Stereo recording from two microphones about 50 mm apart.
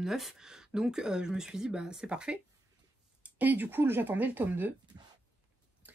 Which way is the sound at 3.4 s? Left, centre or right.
Right.